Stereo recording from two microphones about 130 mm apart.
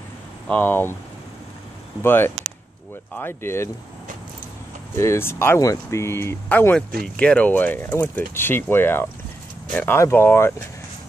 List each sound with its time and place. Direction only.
0.5 s speech: 15° left (ahead or behind)
2.0 s speech: 15° left (ahead or behind)
4.9 s speech: 20° left (ahead or behind)